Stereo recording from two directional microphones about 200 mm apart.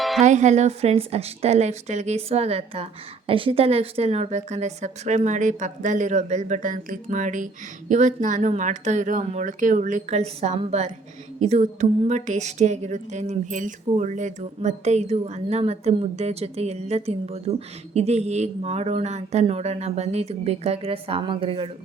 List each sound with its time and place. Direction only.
0.2 s speech: 35° right (ahead or behind)